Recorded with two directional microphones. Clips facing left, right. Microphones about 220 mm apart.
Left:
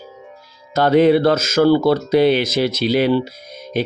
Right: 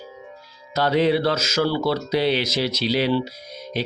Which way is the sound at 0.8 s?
50° left (ahead or behind).